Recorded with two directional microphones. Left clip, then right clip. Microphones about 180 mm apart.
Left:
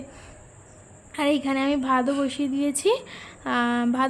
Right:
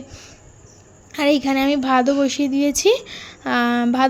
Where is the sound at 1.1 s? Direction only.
20° right (ahead or behind).